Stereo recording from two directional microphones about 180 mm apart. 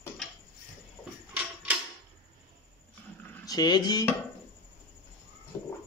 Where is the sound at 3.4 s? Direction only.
20° left (ahead or behind).